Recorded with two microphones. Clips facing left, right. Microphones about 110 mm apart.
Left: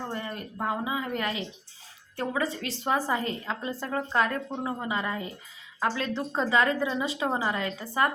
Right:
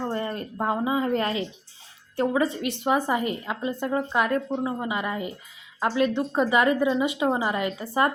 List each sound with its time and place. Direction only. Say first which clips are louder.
0.1 s speech: right 6 dB; 35° right (ahead or behind)
2.1 s a woman's voice: right 6 dB; 25° right (ahead or behind)